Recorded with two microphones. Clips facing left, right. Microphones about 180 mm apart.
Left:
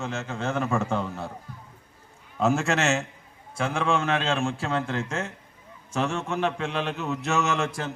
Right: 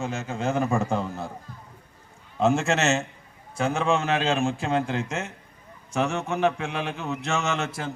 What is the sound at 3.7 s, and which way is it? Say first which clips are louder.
Speech: right 1 dB; 5° right (ahead or behind).